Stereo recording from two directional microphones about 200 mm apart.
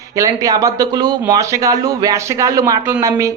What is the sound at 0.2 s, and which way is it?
Speech, 15° right (ahead or behind).